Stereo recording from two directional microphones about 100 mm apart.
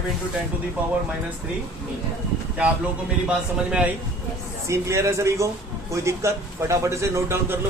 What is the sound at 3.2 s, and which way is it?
Speech, 10° right (ahead or behind).